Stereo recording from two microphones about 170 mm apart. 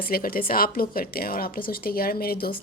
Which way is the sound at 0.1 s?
60° left (ahead or behind).